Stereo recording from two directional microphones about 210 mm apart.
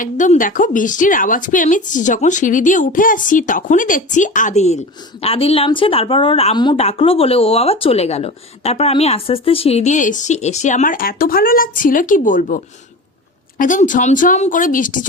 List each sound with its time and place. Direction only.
0.0 s speech: 40° left (ahead or behind)